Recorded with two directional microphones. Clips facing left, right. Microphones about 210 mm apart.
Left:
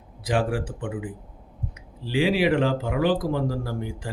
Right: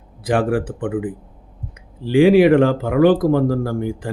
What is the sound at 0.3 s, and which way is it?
Speech, 55° right (ahead or behind).